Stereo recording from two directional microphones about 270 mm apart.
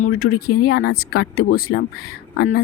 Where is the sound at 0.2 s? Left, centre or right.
Left.